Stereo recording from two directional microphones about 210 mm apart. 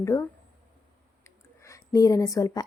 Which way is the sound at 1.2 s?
15° left (ahead or behind).